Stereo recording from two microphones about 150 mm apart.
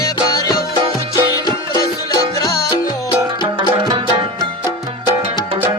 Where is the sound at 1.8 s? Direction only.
25° left (ahead or behind).